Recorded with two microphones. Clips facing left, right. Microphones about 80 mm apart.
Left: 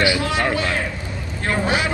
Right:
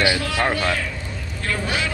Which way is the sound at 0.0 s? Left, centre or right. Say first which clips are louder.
Left 1 dB; left.